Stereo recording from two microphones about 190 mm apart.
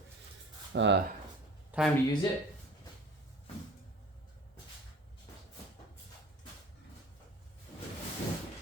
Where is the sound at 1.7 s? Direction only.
Centre (ahead or behind).